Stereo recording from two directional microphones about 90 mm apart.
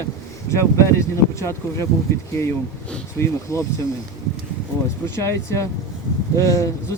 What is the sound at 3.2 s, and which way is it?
Speech, 35° left (ahead or behind).